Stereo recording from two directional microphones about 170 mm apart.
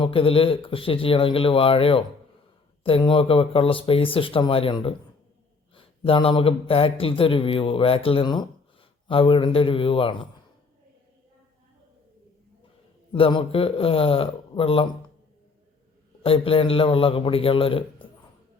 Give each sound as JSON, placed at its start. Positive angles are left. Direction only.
{"t": 0.0, "sound": "a man's voice", "side_deg": 35}
{"t": 13.1, "sound": "a man's voice", "side_deg": 30}
{"t": 16.2, "sound": "a man's voice", "side_deg": 35}